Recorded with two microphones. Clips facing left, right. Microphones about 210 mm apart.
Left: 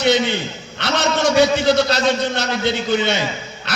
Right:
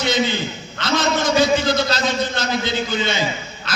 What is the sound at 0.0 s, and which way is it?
Speech, 65° left (ahead or behind).